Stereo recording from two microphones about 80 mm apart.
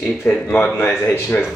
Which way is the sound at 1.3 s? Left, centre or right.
Centre.